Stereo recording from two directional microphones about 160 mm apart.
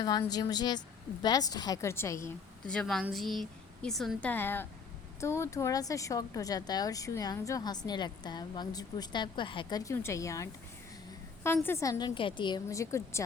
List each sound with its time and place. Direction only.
0.0 s a woman's voice: 25° left (ahead or behind)
2.6 s a woman's voice: 5° left (ahead or behind); by 12.6 s 30° left (ahead or behind)
12.6 s speech: 20° left (ahead or behind)